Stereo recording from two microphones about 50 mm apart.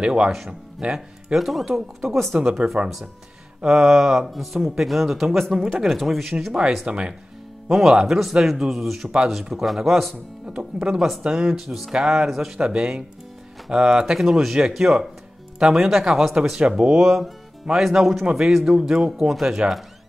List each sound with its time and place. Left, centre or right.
0.0 s speech: centre
1.3 s speech: centre
3.6 s speech: centre
6.9 s speech: centre
10.4 s speech: centre
11.5 s speech: centre
16.3 s speech: centre